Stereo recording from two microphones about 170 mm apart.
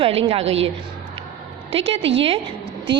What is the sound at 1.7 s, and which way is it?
Speech, 35° right (ahead or behind).